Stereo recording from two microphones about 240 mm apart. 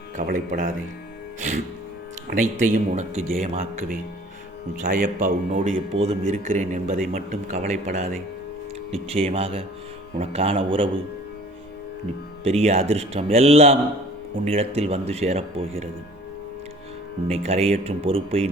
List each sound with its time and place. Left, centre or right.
0.2 s a man's voice: right
2.3 s a man's voice: right
5.0 s a man's voice: right
12.5 s speech: right
17.2 s speech: right